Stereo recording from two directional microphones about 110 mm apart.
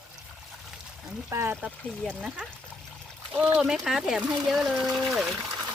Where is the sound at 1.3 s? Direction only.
20° right (ahead or behind).